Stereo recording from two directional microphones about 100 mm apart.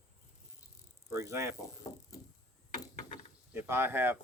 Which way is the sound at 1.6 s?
35° left (ahead or behind).